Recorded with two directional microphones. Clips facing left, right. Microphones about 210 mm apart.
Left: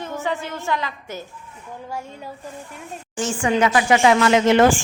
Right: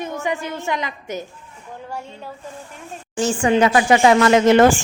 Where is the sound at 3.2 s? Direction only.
35° right (ahead or behind).